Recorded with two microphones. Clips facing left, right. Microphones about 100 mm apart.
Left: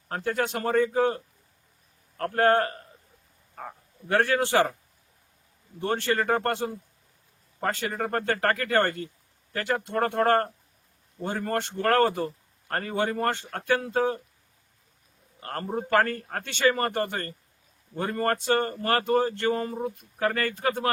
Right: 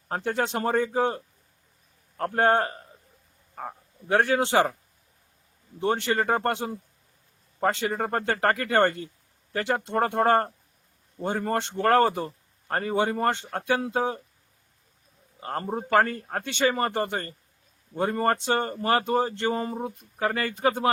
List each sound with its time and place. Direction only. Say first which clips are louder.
0.1 s speech: right 1 dB; 25° right (ahead or behind)
4.1 s speech: right 1 dB; 15° right (ahead or behind)
5.8 s speech: right 1 dB; 15° right (ahead or behind)
15.4 s speech: right 1 dB; 15° right (ahead or behind)